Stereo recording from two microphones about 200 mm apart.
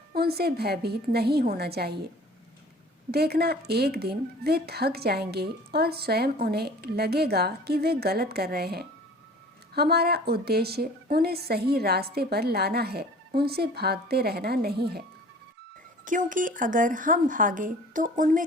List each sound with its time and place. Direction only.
0.1 s a woman's voice: 50° right (ahead or behind)
3.1 s a woman's voice: 50° right (ahead or behind)
16.0 s speech: 40° right (ahead or behind)